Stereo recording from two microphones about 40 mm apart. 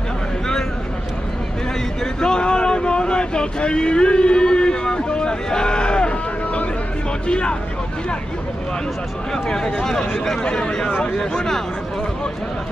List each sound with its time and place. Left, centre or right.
2.1 s vehicle: left
7.2 s speech: left
9.3 s speech: centre